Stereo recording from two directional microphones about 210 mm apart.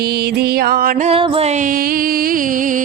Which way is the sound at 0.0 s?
50° right (ahead or behind).